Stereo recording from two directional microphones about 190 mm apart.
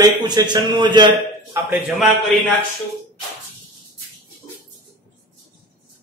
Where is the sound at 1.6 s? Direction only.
5° right (ahead or behind).